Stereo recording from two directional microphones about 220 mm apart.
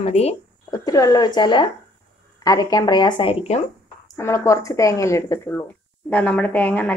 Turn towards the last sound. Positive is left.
turn(degrees=5)  # may be behind; listen again after turning